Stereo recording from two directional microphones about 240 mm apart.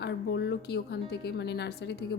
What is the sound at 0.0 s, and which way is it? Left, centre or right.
A woman's voice, left.